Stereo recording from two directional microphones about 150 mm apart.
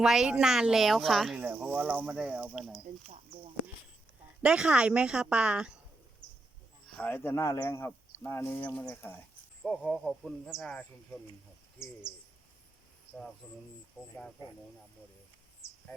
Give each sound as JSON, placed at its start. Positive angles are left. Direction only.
{"t": 0.0, "sound": "speech", "side_deg": -5}
{"t": 1.4, "sound": "speech", "side_deg": -10}
{"t": 4.4, "sound": "speech", "side_deg": -5}
{"t": 6.8, "sound": "speech", "side_deg": 5}
{"t": 9.6, "sound": "speech", "side_deg": 0}
{"t": 13.4, "sound": "speech", "side_deg": 5}